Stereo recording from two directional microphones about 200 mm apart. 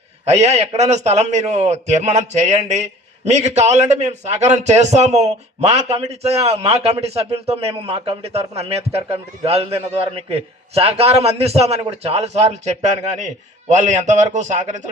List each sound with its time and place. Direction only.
0.3 s a man's voice: 30° right (ahead or behind)